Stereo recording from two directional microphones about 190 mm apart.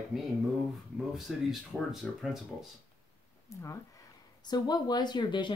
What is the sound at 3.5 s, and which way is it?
Speech, 15° left (ahead or behind).